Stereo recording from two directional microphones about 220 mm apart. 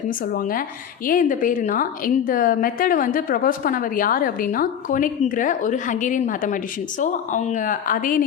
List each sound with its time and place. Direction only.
0.3 s a woman's voice: 40° left (ahead or behind)